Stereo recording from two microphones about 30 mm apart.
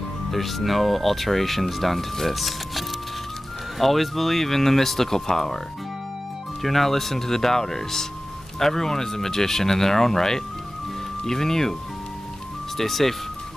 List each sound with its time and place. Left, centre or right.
0.3 s speech: centre
3.8 s speech: centre
6.6 s speech: centre
12.7 s speech: centre